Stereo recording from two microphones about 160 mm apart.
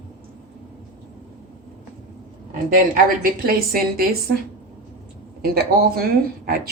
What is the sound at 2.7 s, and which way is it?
Speech, 65° right (ahead or behind).